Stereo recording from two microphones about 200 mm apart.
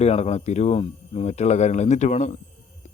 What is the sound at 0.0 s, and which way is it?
Speech, 30° left (ahead or behind).